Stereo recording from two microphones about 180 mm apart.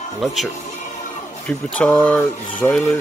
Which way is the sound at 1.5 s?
5° left (ahead or behind).